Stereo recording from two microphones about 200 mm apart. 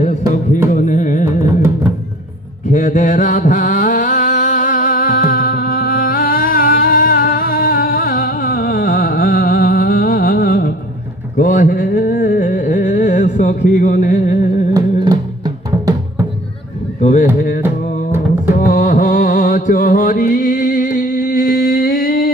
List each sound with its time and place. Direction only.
0.7 s carnatic music: 40° left (ahead or behind)
2.7 s a sound: 40° left (ahead or behind)
12.4 s carnatic music: 40° left (ahead or behind)
13.7 s music: 40° left (ahead or behind)
14.7 s music: 20° right (ahead or behind)
17.0 s a sound: 40° left (ahead or behind)
17.8 s music: 40° left (ahead or behind)